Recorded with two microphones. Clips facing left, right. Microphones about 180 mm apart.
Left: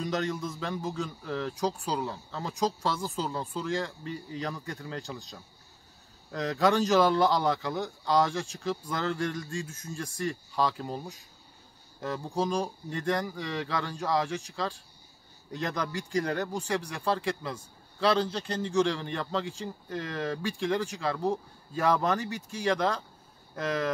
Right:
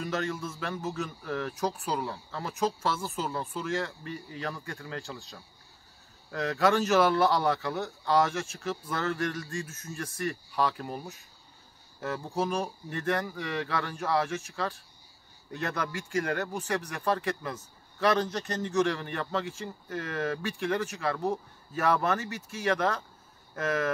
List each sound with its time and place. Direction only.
0.0 s a man's voice: 15° left (ahead or behind)
6.3 s a man's voice: 15° left (ahead or behind)